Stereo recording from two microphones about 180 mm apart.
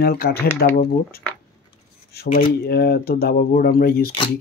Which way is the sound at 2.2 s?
60° left (ahead or behind).